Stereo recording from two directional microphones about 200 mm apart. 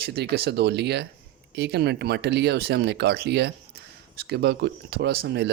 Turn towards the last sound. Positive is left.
turn(degrees=-55)  # may be behind; listen again after turning